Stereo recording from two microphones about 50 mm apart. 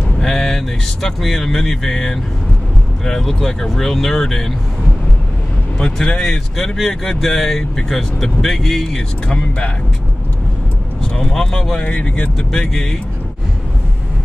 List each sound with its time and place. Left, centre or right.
0.2 s speech: centre
5.8 s speech: centre
11.1 s speech: centre
11.8 s speech: left
12.4 s speech: centre